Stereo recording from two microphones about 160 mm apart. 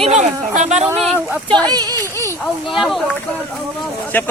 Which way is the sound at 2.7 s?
Centre (ahead or behind).